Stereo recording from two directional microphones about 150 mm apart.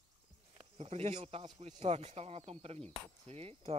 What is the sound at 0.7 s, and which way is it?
Speech, 45° right (ahead or behind).